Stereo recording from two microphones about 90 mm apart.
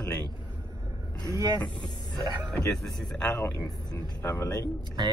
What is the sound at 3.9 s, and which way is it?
Speech, 30° left (ahead or behind).